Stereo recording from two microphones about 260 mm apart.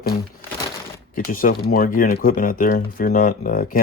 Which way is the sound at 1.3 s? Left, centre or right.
Left.